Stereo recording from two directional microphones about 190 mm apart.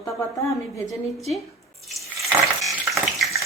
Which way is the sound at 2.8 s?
Centre (ahead or behind).